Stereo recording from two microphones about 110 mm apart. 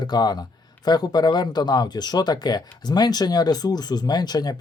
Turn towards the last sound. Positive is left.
turn(degrees=40)  # may be behind; listen again after turning